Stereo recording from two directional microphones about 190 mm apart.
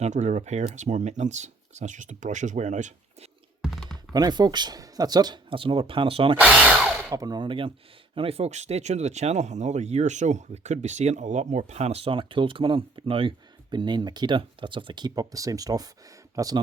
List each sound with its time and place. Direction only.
0.0 s speech: 40° right (ahead or behind)
3.6 s typing: centre (ahead or behind)
4.1 s speech: 20° right (ahead or behind)
6.3 s speech: 5° right (ahead or behind)
7.1 s speech: 20° right (ahead or behind)